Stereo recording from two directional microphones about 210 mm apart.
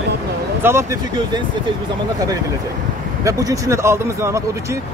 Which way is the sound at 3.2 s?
15° right (ahead or behind).